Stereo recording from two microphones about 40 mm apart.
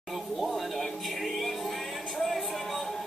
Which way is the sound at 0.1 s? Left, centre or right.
Centre.